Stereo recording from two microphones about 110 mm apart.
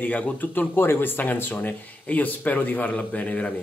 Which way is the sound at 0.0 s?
10° left (ahead or behind).